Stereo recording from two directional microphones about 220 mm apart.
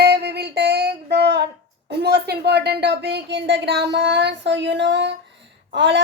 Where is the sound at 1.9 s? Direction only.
50° right (ahead or behind).